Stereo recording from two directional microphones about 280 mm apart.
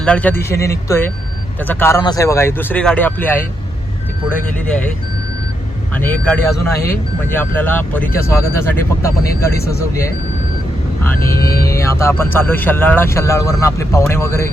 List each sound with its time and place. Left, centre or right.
0.0 s speech: centre
5.9 s speech: centre
9.3 s speech: left
9.7 s speech: centre
11.2 s speech: left
11.7 s speech: centre